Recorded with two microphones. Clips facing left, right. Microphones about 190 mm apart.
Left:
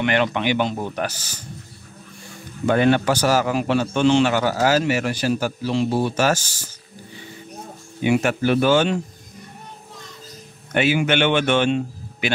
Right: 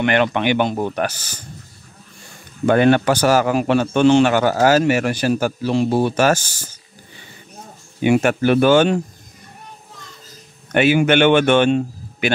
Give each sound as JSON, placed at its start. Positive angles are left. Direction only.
{"t": 0.0, "sound": "a man's voice", "side_deg": -55}
{"t": 2.6, "sound": "a man's voice", "side_deg": -60}
{"t": 8.0, "sound": "a man's voice", "side_deg": -55}
{"t": 10.7, "sound": "a man's voice", "side_deg": -55}